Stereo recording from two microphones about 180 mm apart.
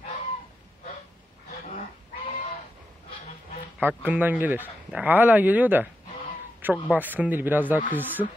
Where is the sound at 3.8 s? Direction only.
10° right (ahead or behind).